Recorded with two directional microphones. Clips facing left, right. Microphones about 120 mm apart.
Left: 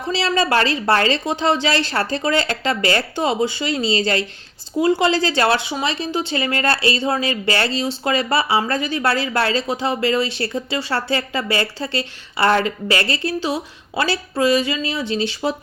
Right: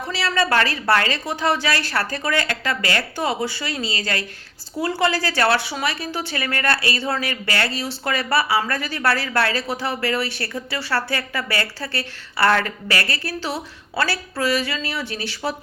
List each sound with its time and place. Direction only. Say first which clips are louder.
0.1 s a woman's voice: left 3 dB; 25° left (ahead or behind)